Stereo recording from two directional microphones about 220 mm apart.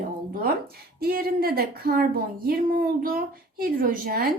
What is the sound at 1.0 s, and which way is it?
A child's voice, 40° right (ahead or behind).